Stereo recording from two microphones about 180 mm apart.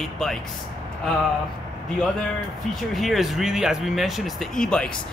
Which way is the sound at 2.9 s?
Centre (ahead or behind).